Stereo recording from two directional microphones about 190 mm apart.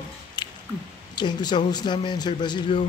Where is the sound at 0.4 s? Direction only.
25° left (ahead or behind).